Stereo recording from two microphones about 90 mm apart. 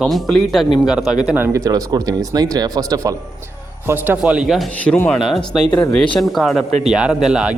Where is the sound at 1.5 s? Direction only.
40° right (ahead or behind).